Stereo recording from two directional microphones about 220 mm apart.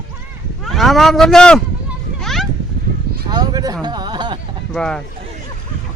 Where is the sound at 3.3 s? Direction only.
20° right (ahead or behind).